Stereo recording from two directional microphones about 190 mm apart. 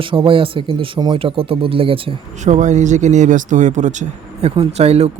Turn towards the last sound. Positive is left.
turn(degrees=-35)  # may be behind; listen again after turning